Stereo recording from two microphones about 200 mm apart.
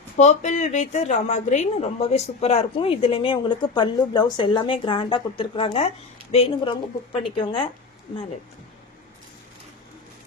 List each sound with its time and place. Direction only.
0.2 s a woman's voice: 35° left (ahead or behind)